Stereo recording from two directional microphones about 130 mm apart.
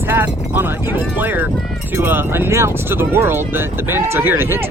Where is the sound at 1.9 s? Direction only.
15° right (ahead or behind).